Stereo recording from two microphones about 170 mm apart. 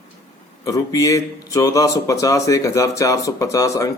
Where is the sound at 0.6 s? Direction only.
20° left (ahead or behind).